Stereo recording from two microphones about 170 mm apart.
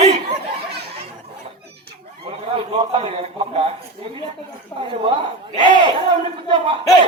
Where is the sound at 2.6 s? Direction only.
30° right (ahead or behind).